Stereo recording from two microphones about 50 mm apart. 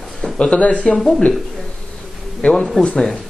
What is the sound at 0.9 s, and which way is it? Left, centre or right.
Speech, centre.